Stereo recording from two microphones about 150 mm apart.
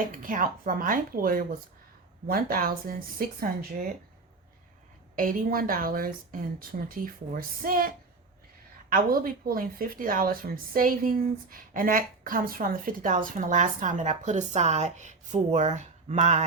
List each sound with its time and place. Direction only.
0.0 s a woman's voice: 65° right (ahead or behind); by 3.8 s 90° right
5.1 s a woman's voice: 70° right (ahead or behind); by 16.4 s 50° right (ahead or behind)